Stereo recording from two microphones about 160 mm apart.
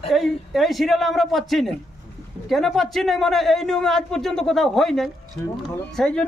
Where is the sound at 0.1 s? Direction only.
Centre (ahead or behind).